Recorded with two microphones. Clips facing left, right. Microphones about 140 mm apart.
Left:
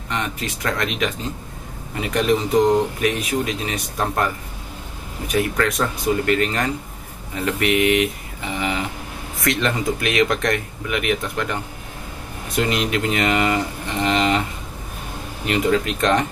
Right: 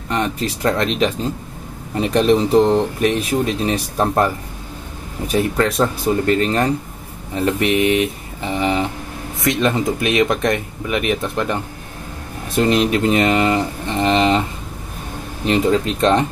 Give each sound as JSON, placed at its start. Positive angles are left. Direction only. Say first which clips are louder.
{"t": 0.1, "sound": "speech", "louder": "right 6 dB", "side_deg": -35}
{"t": 5.3, "sound": "speech", "louder": "right 3 dB", "side_deg": -30}
{"t": 12.6, "sound": "speech", "louder": "right 7 dB", "side_deg": -30}
{"t": 14.0, "sound": "cattle", "louder": "right 4 dB", "side_deg": -25}
{"t": 15.4, "sound": "speech", "louder": "right 3 dB", "side_deg": -30}